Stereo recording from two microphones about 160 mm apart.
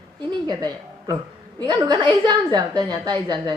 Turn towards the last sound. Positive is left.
turn(degrees=-25)  # may be behind; listen again after turning